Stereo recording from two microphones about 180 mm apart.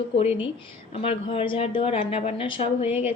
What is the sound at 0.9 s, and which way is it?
A woman's voice, 30° left (ahead or behind).